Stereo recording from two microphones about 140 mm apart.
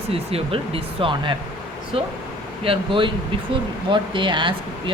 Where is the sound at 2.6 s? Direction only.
40° right (ahead or behind).